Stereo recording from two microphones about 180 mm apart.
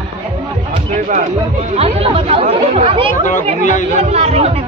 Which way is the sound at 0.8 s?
40° right (ahead or behind).